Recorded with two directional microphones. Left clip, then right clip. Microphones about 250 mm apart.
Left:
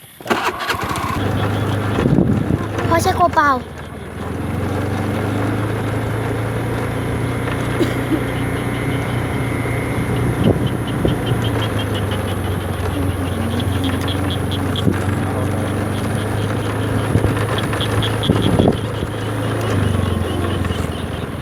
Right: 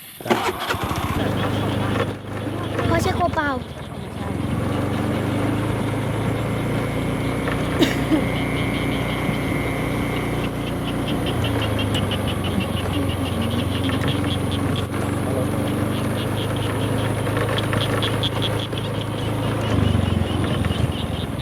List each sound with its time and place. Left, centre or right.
0.3 s engine starting: left
2.9 s speech: centre